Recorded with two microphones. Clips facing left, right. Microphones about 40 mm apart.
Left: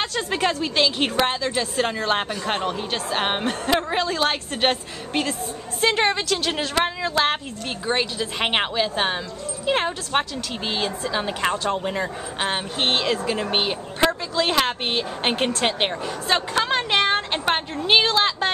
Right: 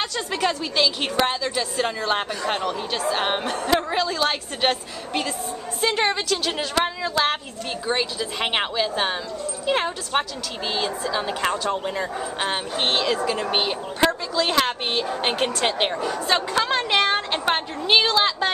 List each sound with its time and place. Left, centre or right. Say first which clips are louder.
0.0 s a woman's voice: left 1 dB; left
6.7 s a woman's voice: even; centre